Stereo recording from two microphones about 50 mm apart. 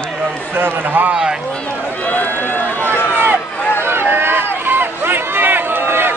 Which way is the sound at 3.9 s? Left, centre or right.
Right.